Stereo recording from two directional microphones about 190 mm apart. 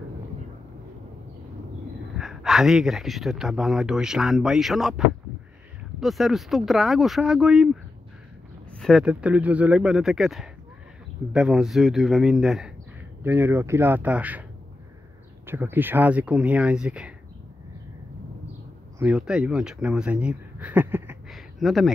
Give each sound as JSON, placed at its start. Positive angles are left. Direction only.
{"t": 2.1, "sound": "a man's voice", "side_deg": 0}
{"t": 15.4, "sound": "speech", "side_deg": -10}
{"t": 18.9, "sound": "speech", "side_deg": -5}
{"t": 21.3, "sound": "a sound", "side_deg": 0}